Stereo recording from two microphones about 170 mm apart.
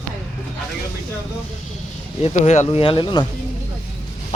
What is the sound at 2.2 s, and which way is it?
Speech, 40° left (ahead or behind).